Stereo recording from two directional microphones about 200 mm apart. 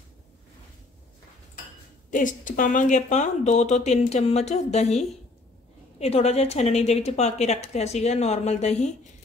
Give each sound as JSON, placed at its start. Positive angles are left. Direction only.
{"t": 2.0, "sound": "speech", "side_deg": 40}